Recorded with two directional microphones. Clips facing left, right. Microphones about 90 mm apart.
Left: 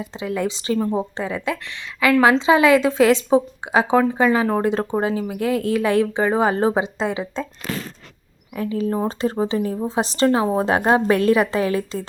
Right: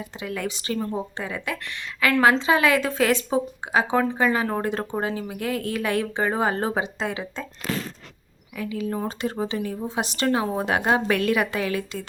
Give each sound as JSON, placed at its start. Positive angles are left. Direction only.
{"t": 0.0, "sound": "speech", "side_deg": 25}
{"t": 8.5, "sound": "a woman's voice", "side_deg": 35}